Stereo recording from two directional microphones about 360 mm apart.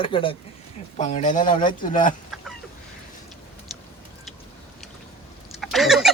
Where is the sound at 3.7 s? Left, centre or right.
Centre.